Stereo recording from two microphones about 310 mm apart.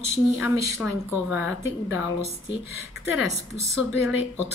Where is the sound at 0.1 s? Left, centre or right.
Centre.